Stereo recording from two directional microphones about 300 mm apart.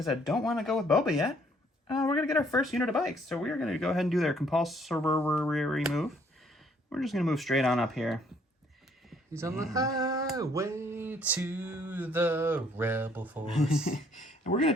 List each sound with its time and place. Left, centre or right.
0.0 s speech: centre
10.3 s a sound: centre
13.8 s speech: left